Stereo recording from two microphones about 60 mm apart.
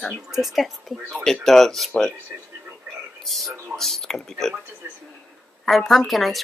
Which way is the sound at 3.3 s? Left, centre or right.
Centre.